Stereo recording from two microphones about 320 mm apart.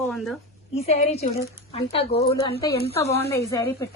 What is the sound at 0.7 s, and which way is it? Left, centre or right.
A woman's voice, centre.